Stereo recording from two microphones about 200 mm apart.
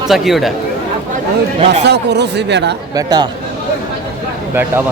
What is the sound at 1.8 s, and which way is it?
Speech, 60° right (ahead or behind).